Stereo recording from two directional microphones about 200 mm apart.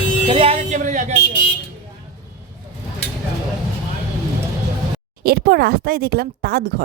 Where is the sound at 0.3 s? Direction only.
25° right (ahead or behind).